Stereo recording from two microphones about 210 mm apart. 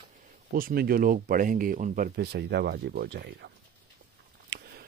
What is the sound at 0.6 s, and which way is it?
Speech, 45° right (ahead or behind).